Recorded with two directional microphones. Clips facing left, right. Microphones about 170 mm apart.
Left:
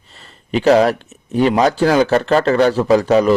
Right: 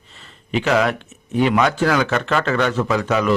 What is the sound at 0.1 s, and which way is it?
A man's voice, 40° left (ahead or behind).